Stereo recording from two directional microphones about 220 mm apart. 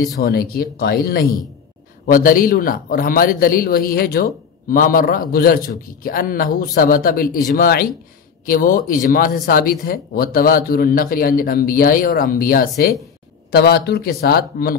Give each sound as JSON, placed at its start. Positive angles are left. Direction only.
{"t": 0.2, "sound": "a man's voice", "side_deg": 45}